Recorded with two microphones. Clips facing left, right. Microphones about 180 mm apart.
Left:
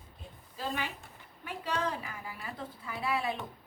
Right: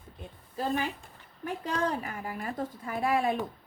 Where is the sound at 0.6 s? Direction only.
45° right (ahead or behind).